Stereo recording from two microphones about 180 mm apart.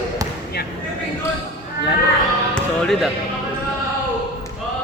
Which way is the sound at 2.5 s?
5° left (ahead or behind).